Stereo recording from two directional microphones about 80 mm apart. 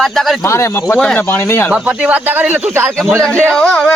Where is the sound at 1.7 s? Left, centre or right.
Centre.